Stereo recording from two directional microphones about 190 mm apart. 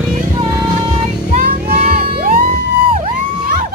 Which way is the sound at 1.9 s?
50° right (ahead or behind).